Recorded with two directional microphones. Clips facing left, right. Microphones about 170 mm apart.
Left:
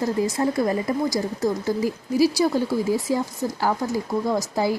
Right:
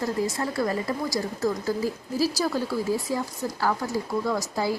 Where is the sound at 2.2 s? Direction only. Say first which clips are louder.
Left 6 dB; 15° left (ahead or behind).